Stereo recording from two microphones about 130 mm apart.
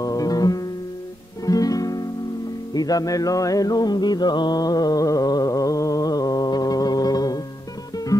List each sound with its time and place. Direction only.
0.0 s music: 25° left (ahead or behind)
1.4 s guitar: 30° left (ahead or behind)
2.7 s music: 30° left (ahead or behind)